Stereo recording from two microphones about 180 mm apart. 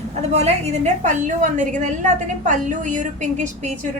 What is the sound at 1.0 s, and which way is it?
A woman's voice, 45° right (ahead or behind).